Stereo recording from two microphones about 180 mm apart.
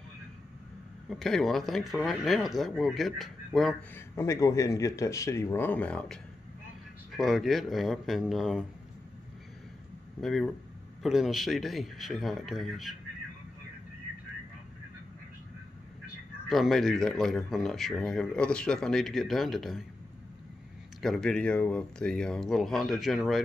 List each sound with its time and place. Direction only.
1.0 s speech: centre (ahead or behind)
3.9 s speech: 15° left (ahead or behind); by 8.6 s centre (ahead or behind)
10.2 s speech: centre (ahead or behind)
16.4 s speech: centre (ahead or behind)
21.0 s speech: centre (ahead or behind)